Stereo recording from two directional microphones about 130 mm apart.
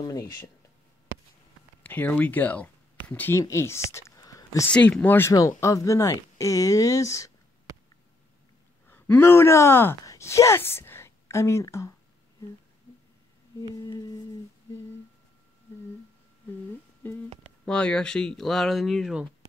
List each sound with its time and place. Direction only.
0.0 s speech: 30° left (ahead or behind)
1.8 s speech: 15° left (ahead or behind)
4.6 s speech: 10° left (ahead or behind); by 7.3 s 25° left (ahead or behind)
8.8 s speech: 15° left (ahead or behind)
13.6 s a sound: 30° left (ahead or behind)
17.0 s speech: 15° left (ahead or behind); by 19.2 s centre (ahead or behind)